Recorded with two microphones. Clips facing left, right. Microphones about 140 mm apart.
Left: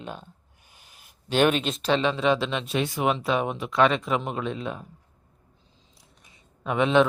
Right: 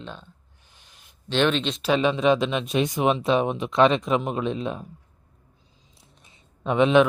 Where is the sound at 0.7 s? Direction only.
10° left (ahead or behind).